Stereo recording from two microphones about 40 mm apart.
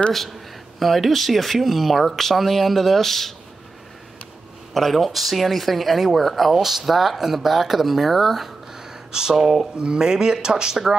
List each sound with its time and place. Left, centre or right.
0.7 s speech: centre
4.7 s speech: centre
9.1 s speech: centre